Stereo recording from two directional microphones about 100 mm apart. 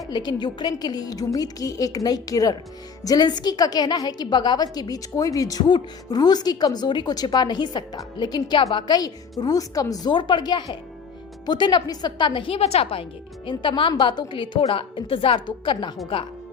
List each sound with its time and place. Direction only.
0.1 s a woman's voice: 45° left (ahead or behind); by 15.4 s 65° left (ahead or behind)
15.4 s a woman's voice: 50° left (ahead or behind)